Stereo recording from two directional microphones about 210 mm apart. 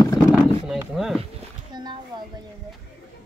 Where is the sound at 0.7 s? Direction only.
5° right (ahead or behind).